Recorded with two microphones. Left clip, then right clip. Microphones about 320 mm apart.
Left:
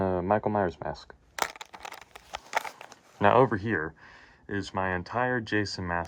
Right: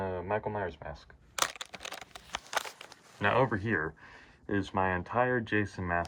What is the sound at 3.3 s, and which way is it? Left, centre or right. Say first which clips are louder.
Speech: left 5 dB; centre.